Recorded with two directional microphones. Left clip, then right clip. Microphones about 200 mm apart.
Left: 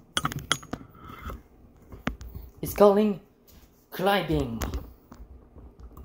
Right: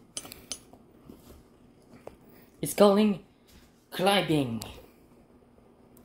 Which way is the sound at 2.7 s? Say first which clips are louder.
Left 2 dB; 20° right (ahead or behind).